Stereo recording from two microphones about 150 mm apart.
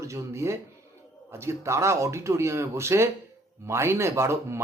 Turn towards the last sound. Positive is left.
turn(degrees=-20)  # may be behind; listen again after turning